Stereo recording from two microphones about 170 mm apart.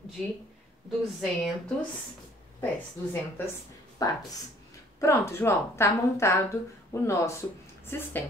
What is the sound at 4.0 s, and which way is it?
Speech, 20° left (ahead or behind).